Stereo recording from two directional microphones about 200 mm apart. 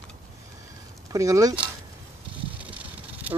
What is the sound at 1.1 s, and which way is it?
Speech, 15° right (ahead or behind).